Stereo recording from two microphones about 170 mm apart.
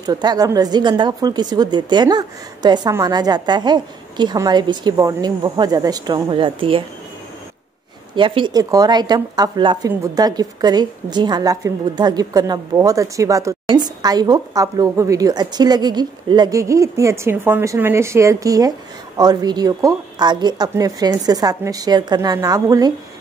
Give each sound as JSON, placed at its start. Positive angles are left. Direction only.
{"t": 0.0, "sound": "a woman's voice", "side_deg": -25}
{"t": 8.2, "sound": "a woman's voice", "side_deg": -30}